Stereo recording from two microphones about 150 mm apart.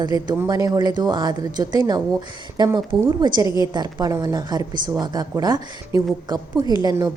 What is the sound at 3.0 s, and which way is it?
Speech, 15° right (ahead or behind).